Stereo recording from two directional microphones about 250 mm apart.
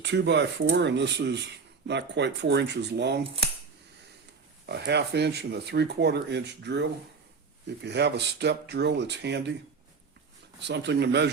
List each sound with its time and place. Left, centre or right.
0.0 s speech: right
4.6 s speech: right
10.7 s speech: right